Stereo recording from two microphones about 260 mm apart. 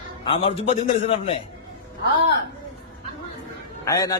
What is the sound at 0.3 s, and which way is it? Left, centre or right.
A man's voice, left.